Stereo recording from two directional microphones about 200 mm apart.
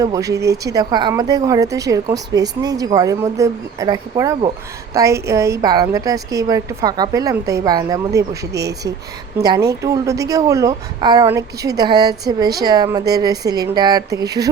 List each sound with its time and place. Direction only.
0.0 s speech: 15° right (ahead or behind)
9.4 s a woman's voice: 20° right (ahead or behind)